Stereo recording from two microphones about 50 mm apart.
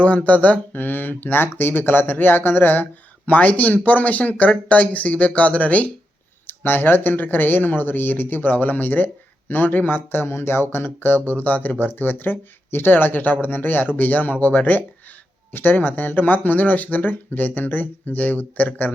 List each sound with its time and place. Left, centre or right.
0.0 s speech: left
3.2 s speech: left
6.5 s speech: left